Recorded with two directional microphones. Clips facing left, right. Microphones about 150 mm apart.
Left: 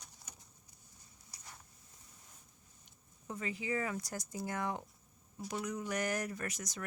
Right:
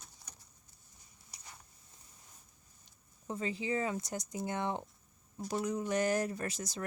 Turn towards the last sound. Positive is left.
turn(degrees=-30)  # may be behind; listen again after turning